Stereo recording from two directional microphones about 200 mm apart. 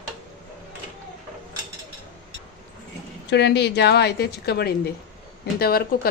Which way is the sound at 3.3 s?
55° left (ahead or behind).